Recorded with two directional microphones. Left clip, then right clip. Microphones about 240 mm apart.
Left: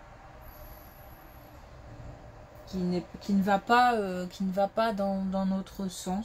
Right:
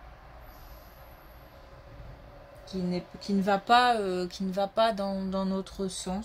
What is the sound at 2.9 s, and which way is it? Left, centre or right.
Speech, right.